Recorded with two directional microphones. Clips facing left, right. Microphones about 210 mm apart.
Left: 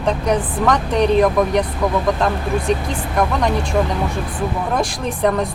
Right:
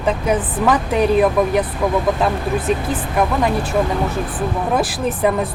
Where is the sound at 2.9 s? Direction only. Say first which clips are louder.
Right 1 dB; 5° right (ahead or behind).